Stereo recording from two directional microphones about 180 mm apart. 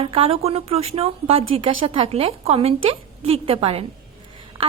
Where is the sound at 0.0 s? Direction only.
30° right (ahead or behind).